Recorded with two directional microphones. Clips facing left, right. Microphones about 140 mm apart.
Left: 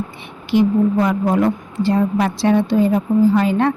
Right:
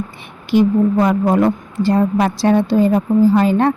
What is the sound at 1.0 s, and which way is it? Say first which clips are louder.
Speech: right 2 dB; 40° right (ahead or behind).